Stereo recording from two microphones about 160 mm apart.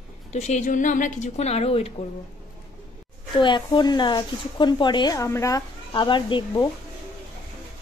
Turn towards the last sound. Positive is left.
turn(degrees=30)  # may be behind; listen again after turning